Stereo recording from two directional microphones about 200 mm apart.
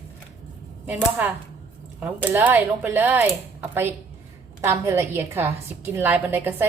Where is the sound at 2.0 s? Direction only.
10° right (ahead or behind).